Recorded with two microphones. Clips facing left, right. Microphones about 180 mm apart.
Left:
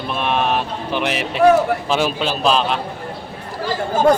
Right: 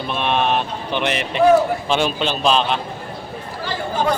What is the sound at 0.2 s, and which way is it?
Speech, centre (ahead or behind).